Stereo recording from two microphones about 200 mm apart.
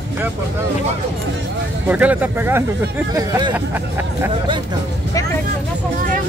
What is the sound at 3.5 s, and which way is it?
Speech, 10° right (ahead or behind).